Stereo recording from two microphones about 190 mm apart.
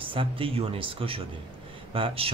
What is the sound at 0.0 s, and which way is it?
Speech, 30° right (ahead or behind).